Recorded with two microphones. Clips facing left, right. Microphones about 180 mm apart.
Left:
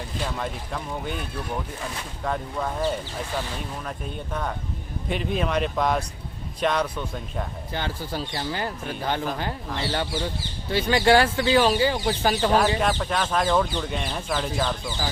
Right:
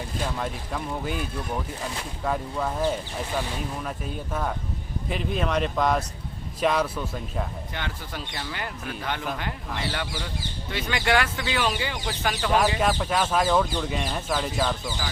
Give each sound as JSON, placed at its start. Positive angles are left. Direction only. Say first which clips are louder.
{"t": 0.3, "sound": "speech", "louder": "even", "side_deg": 0}
{"t": 2.2, "sound": "speech", "louder": "even", "side_deg": -5}
{"t": 7.7, "sound": "speech", "louder": "left 5 dB", "side_deg": 30}
{"t": 12.6, "sound": "speech", "louder": "even", "side_deg": -5}